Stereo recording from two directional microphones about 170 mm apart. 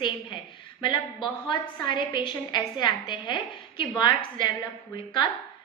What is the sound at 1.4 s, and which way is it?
A woman's voice, 25° left (ahead or behind).